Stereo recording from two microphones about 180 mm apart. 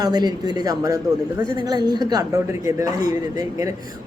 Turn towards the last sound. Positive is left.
turn(degrees=-20)  # may be behind; listen again after turning